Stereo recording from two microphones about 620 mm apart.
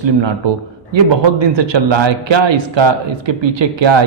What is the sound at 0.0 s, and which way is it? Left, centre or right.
A man's voice, right.